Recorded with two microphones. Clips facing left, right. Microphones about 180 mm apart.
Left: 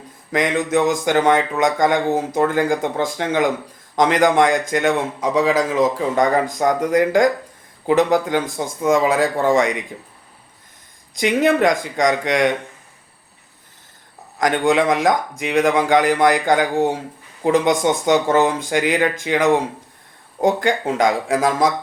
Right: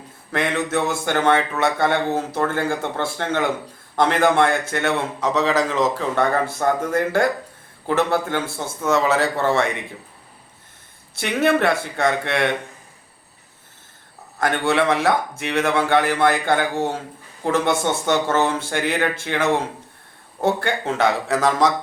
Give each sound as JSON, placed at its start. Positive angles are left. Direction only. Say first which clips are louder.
{"t": 0.3, "sound": "a man's voice", "louder": "left 3 dB", "side_deg": 15}
{"t": 11.1, "sound": "a man's voice", "louder": "left 3 dB", "side_deg": 15}
{"t": 14.4, "sound": "a man's voice", "louder": "left 3 dB", "side_deg": 15}